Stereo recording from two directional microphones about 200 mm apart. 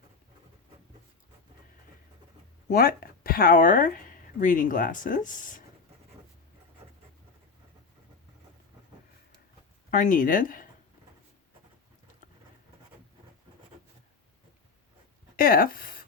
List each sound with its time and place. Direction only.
2.6 s speech: 45° left (ahead or behind)
9.9 s speech: 45° left (ahead or behind)
15.4 s speech: 45° left (ahead or behind)